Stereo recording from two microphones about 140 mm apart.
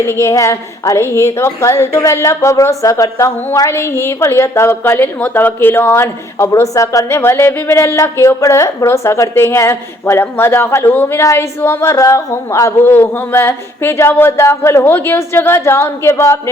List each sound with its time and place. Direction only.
0.0 s a woman's voice: 20° left (ahead or behind)